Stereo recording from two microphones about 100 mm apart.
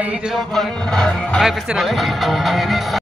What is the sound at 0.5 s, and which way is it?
Music, 5° left (ahead or behind).